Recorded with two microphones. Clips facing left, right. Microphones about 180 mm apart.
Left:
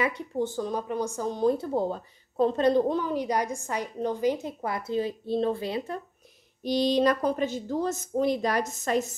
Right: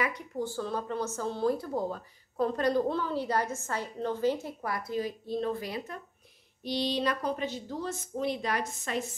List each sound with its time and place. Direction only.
0.0 s speech: 20° left (ahead or behind)
6.6 s a woman's voice: 45° left (ahead or behind)